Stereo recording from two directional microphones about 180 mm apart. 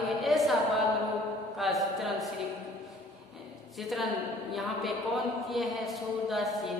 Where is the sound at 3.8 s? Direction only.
Centre (ahead or behind).